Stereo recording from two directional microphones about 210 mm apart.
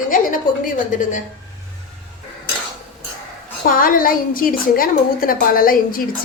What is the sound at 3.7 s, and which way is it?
A woman's voice, 40° left (ahead or behind).